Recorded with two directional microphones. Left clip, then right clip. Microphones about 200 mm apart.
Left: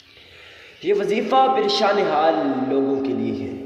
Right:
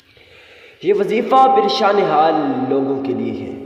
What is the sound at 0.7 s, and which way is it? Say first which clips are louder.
A man's voice: right 4 dB; 25° right (ahead or behind).